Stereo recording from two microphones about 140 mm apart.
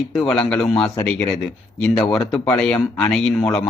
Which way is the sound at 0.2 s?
5° left (ahead or behind).